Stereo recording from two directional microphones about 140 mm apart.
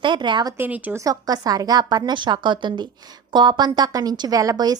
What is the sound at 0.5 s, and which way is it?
Speech, 10° right (ahead or behind).